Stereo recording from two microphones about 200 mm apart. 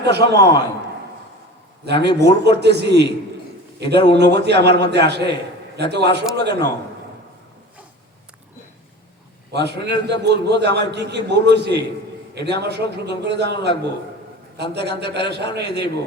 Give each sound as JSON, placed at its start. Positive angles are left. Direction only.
{"t": 0.0, "sound": "a man's voice", "side_deg": -55}
{"t": 1.8, "sound": "a man's voice", "side_deg": -55}
{"t": 9.5, "sound": "a man's voice", "side_deg": -55}